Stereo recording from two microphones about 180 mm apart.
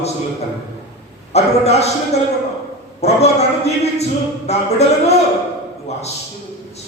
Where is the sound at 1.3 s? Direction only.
35° left (ahead or behind).